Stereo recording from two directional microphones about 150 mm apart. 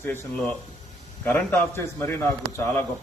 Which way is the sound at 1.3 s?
15° left (ahead or behind).